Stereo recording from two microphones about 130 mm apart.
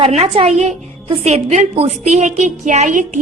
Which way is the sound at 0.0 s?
50° right (ahead or behind).